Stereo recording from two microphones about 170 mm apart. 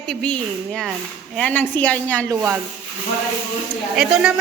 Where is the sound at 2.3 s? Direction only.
15° right (ahead or behind).